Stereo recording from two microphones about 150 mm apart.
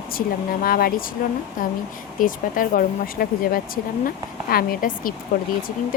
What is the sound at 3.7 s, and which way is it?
Speech, 80° left.